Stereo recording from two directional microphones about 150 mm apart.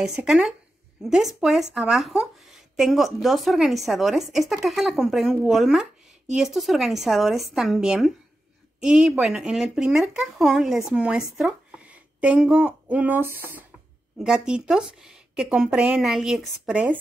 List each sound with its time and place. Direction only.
0.0 s speech: 5° right (ahead or behind)